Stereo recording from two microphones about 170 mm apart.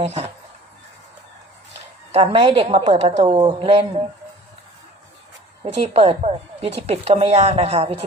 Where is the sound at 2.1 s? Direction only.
40° right (ahead or behind).